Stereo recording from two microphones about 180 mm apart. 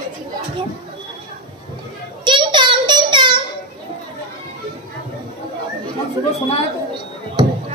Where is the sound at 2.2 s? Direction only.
25° right (ahead or behind).